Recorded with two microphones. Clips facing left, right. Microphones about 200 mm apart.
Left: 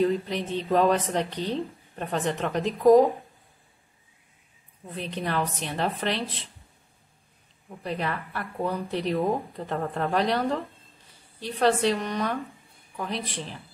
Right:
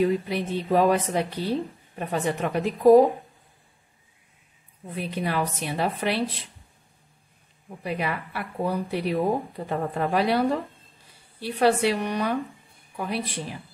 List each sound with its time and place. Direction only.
0.0 s a woman's voice: 10° right (ahead or behind)
4.8 s a woman's voice: 10° right (ahead or behind)
7.8 s a woman's voice: 10° right (ahead or behind)